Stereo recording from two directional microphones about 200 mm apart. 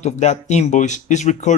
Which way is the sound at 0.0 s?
35° left (ahead or behind).